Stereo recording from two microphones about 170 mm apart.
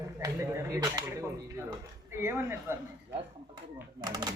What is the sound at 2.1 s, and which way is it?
Speech, 15° right (ahead or behind).